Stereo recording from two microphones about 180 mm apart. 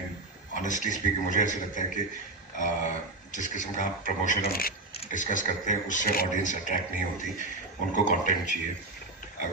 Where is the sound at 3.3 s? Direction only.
45° left (ahead or behind).